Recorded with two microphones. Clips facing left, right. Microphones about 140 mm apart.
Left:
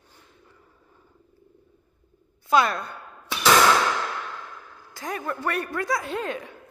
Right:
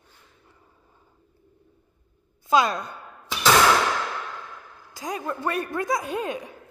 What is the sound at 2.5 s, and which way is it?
Speech, 20° right (ahead or behind).